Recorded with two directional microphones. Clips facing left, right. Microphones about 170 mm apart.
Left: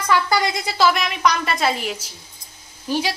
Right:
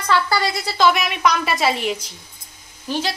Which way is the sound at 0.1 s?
20° left (ahead or behind).